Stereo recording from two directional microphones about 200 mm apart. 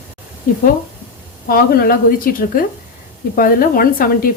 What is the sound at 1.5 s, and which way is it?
A woman's voice, 50° left (ahead or behind).